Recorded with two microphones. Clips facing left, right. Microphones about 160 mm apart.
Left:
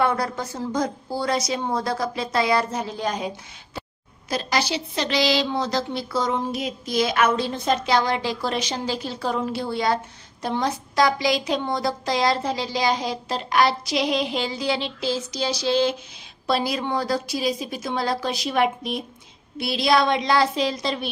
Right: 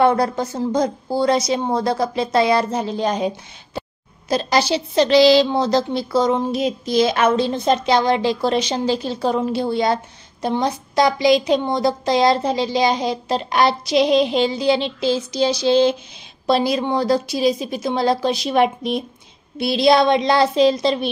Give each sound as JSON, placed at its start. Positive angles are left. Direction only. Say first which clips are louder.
{"t": 0.0, "sound": "a woman's voice", "louder": "right 7 dB", "side_deg": -25}